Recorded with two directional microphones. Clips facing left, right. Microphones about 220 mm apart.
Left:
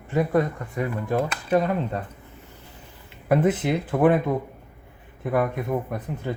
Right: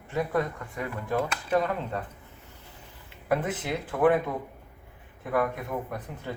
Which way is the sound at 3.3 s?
20° left (ahead or behind).